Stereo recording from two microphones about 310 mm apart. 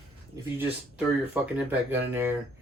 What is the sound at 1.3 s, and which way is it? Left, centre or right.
Speech, centre.